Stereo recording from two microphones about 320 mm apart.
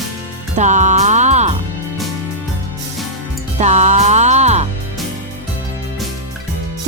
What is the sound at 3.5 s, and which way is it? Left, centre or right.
Music, right.